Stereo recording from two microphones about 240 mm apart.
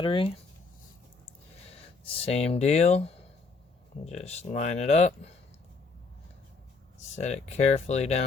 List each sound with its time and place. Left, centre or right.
0.0 s speech: left
2.1 s speech: left
7.0 s speech: left